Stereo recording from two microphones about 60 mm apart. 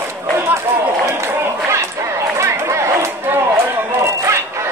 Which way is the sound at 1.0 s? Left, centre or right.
Right.